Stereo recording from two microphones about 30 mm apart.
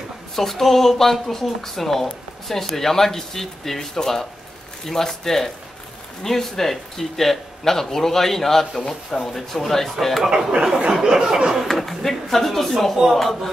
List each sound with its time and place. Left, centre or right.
0.4 s speech: centre
10.3 s a sound: right
11.6 s speech: centre